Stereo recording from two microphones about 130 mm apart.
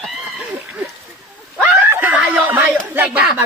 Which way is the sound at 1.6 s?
15° right (ahead or behind).